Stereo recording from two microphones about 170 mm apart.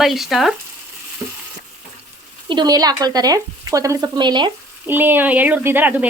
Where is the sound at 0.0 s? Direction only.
Centre (ahead or behind).